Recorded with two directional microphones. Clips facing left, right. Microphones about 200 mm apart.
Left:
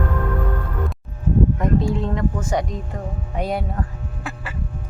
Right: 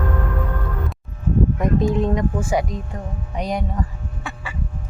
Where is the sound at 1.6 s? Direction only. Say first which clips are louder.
Right 2 dB; 20° right (ahead or behind).